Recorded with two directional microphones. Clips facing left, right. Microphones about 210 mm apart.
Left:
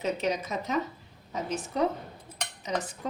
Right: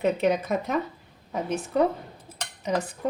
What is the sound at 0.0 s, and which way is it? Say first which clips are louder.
Speech: right 6 dB; 55° right (ahead or behind).